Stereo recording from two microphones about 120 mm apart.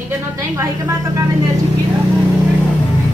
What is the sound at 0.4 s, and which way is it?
Speech, 25° right (ahead or behind).